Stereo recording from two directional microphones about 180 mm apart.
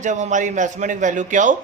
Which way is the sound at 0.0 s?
45° right (ahead or behind).